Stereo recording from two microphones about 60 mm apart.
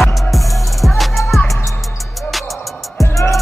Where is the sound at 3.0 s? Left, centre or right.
Left.